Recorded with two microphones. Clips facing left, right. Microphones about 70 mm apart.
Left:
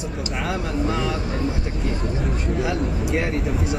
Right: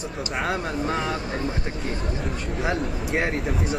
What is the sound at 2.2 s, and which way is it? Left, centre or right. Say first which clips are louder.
Speech: left 3 dB; centre.